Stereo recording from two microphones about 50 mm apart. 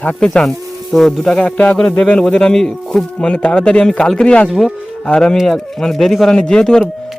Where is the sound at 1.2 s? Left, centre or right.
Centre.